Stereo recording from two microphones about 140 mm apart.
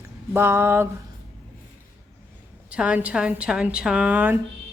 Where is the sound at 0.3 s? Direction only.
15° right (ahead or behind).